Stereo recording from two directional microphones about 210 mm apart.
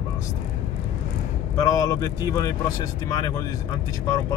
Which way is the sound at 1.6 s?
15° left (ahead or behind).